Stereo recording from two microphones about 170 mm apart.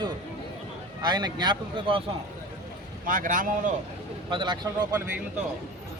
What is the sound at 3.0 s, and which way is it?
Speech, 50° right (ahead or behind).